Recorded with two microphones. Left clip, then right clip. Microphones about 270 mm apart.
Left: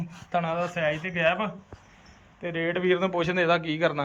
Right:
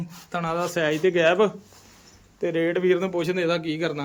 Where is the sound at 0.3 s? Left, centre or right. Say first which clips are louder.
Right 1 dB; centre.